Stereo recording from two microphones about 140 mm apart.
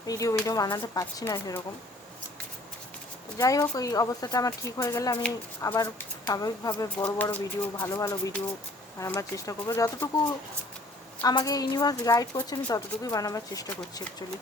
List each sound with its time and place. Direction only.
0.1 s a woman's voice: 25° left (ahead or behind)
3.3 s a woman's voice: 25° left (ahead or behind)
7.2 s a woman's voice: 10° left (ahead or behind)
11.2 s a woman's voice: 30° left (ahead or behind)